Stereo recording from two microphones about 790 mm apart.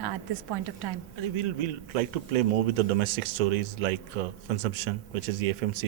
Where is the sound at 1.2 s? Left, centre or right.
Right.